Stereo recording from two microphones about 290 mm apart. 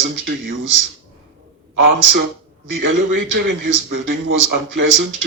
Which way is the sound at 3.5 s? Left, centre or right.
Right.